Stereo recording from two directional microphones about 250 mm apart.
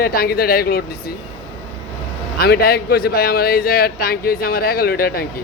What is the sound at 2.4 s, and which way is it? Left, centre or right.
A man's voice, left.